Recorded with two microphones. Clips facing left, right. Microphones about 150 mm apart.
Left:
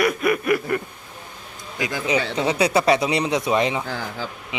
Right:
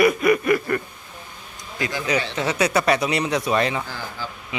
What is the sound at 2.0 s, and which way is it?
Speech, 25° left (ahead or behind).